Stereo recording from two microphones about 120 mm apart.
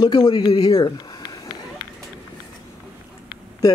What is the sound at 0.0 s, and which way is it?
Speech, 35° left (ahead or behind).